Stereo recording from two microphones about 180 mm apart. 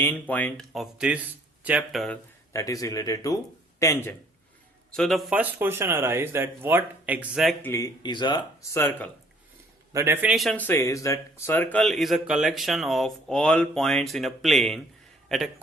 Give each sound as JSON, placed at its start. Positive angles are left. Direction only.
{"t": 0.0, "sound": "speech", "side_deg": 10}
{"t": 2.5, "sound": "speech", "side_deg": 15}
{"t": 4.9, "sound": "a man's voice", "side_deg": 0}
{"t": 7.6, "sound": "speech", "side_deg": 15}
{"t": 9.9, "sound": "speech", "side_deg": -15}